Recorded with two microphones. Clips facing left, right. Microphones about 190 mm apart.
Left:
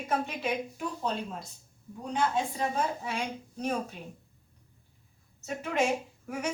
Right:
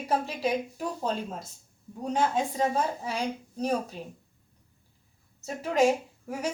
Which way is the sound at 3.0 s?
35° right (ahead or behind).